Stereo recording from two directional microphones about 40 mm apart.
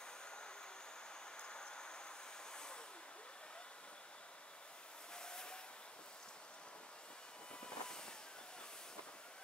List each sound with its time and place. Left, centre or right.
1.4 s vehicle: left
5.1 s vehicle: centre
7.6 s vehicle: centre